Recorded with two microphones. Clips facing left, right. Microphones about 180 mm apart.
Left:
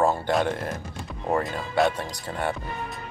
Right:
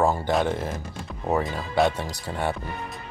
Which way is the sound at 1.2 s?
5° right (ahead or behind).